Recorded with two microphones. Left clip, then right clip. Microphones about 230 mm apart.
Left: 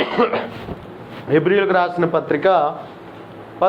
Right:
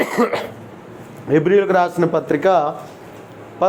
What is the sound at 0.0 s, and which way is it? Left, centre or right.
A man's voice, right.